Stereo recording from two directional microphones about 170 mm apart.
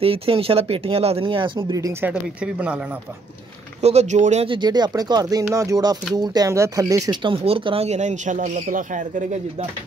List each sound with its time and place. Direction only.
0.0 s speech: 35° right (ahead or behind); by 2.8 s 5° right (ahead or behind)
3.8 s speech: 40° right (ahead or behind)
4.5 s speech: 25° right (ahead or behind); by 9.7 s 45° right (ahead or behind)